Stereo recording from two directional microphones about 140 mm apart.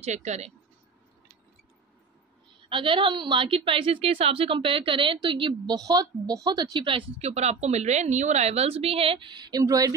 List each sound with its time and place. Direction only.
0.0 s speech: 55° right (ahead or behind)
2.7 s a woman's voice: 35° right (ahead or behind)